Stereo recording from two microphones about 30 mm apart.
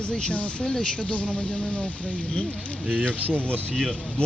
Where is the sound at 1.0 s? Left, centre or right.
Left.